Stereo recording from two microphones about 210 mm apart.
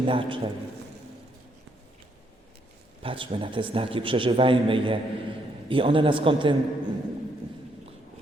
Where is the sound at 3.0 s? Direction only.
25° right (ahead or behind).